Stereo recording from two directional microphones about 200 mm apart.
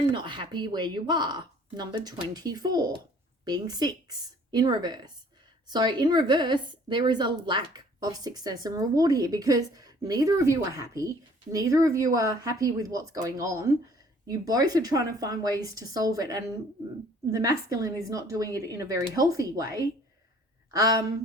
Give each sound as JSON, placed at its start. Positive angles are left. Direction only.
{"t": 0.1, "sound": "a woman's voice", "side_deg": -25}